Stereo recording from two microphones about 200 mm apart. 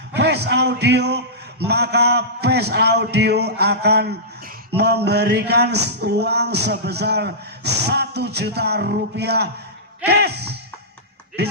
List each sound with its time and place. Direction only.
0.1 s a man's voice: 60° right (ahead or behind)
1.6 s a sound: 55° right (ahead or behind)
11.4 s speech: 55° right (ahead or behind)